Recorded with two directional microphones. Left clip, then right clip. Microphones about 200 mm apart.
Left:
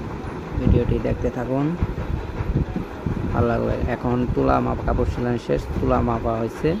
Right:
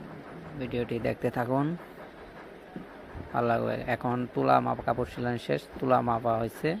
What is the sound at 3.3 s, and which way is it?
Speech, 20° right (ahead or behind).